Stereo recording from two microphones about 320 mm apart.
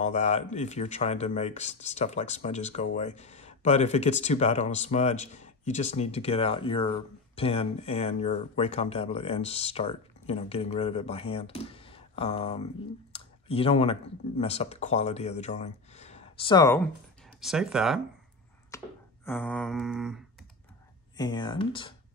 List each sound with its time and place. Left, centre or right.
0.0 s speech: left
13.1 s clicking: centre
14.4 s speech: centre
17.4 s mantra: centre
18.7 s a sound: centre
19.2 s mantra: centre
21.2 s speech: centre